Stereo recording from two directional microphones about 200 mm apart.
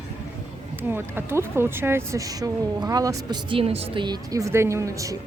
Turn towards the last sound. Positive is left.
turn(degrees=-15)  # may be behind; listen again after turning